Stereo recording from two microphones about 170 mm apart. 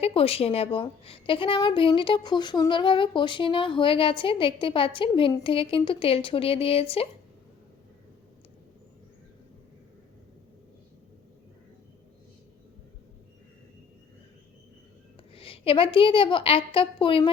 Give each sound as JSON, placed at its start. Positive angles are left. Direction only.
{"t": 0.0, "sound": "a woman's voice", "side_deg": 35}
{"t": 15.4, "sound": "a woman's voice", "side_deg": 35}